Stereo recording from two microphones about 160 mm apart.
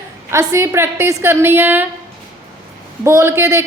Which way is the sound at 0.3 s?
15° right (ahead or behind).